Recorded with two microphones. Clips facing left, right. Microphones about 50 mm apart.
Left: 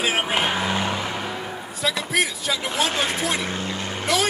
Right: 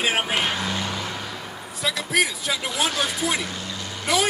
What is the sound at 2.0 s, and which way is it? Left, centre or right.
Speech, centre.